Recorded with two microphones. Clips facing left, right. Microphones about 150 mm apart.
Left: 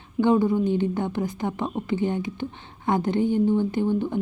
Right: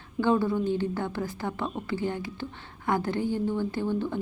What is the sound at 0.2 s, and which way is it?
A woman's voice, 15° left (ahead or behind).